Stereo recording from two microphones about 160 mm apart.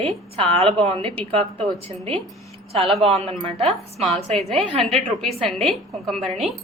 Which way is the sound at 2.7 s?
40° right (ahead or behind).